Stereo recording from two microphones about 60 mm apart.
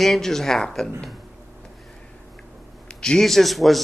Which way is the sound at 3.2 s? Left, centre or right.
Centre.